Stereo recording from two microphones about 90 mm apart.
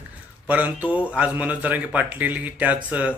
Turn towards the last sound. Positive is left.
turn(degrees=-15)  # may be behind; listen again after turning